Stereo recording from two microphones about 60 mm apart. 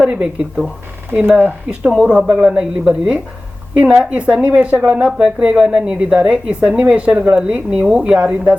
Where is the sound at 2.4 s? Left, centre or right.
Centre.